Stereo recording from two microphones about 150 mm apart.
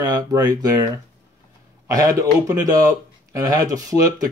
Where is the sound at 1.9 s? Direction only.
25° right (ahead or behind).